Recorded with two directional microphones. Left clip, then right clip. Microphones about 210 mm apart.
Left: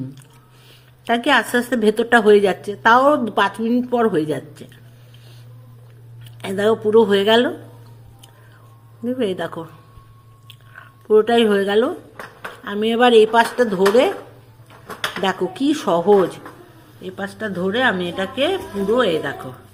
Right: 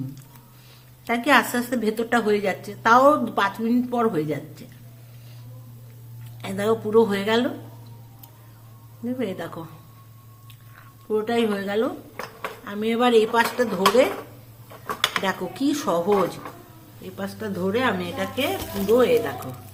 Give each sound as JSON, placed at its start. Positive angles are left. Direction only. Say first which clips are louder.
{"t": 1.0, "sound": "a woman's voice", "louder": "left 2 dB", "side_deg": 15}
{"t": 6.4, "sound": "a woman's voice", "louder": "left 6 dB", "side_deg": 15}
{"t": 9.0, "sound": "a woman's voice", "louder": "left 7 dB", "side_deg": 15}
{"t": 11.1, "sound": "a woman's voice", "louder": "left 9 dB", "side_deg": 20}
{"t": 15.2, "sound": "a woman's voice", "louder": "left 5 dB", "side_deg": 15}